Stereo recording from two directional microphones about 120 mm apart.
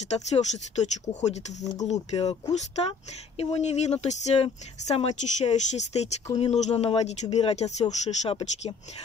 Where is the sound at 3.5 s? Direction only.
65° left (ahead or behind).